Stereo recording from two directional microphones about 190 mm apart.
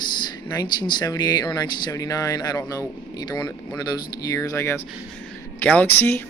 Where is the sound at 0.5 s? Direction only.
20° left (ahead or behind).